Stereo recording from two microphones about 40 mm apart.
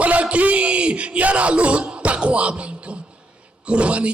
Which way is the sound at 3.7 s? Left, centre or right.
Right.